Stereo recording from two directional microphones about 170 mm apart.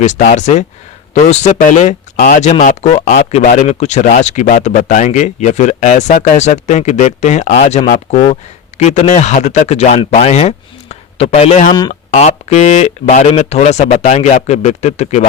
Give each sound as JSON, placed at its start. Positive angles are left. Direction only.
{"t": 0.0, "sound": "speech", "side_deg": 40}
{"t": 11.7, "sound": "speech", "side_deg": 25}
{"t": 12.1, "sound": "speech", "side_deg": 40}